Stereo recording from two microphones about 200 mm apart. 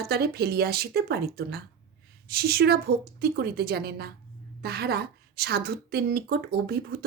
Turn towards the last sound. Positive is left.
turn(degrees=-50)  # may be behind; listen again after turning